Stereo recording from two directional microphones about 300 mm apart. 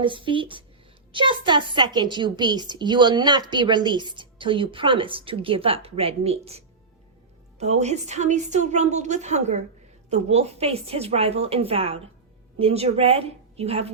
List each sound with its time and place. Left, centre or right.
0.0 s a woman's voice: centre